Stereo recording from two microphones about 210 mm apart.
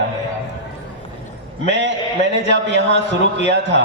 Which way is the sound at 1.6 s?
60° right (ahead or behind).